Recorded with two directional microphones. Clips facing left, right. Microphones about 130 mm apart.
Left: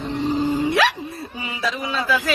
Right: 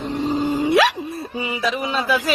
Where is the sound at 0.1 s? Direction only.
20° right (ahead or behind).